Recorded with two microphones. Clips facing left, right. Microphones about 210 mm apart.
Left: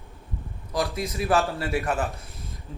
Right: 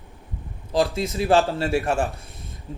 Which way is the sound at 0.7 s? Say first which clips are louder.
Right 5 dB; 30° right (ahead or behind).